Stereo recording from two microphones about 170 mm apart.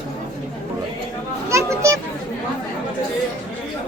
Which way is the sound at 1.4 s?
15° right (ahead or behind).